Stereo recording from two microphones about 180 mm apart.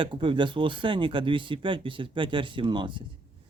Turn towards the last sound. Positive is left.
turn(degrees=-25)  # may be behind; listen again after turning